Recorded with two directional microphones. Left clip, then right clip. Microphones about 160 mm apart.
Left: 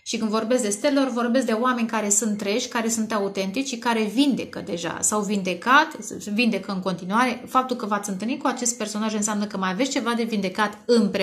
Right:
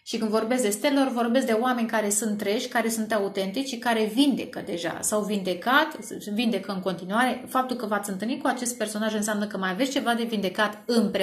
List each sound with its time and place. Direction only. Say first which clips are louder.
0.1 s a woman's voice: left 2 dB; 40° left (ahead or behind)
7.1 s speech: left 3 dB; 45° left (ahead or behind)